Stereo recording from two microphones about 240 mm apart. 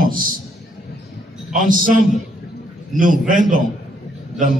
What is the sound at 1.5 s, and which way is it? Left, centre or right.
Speech, right.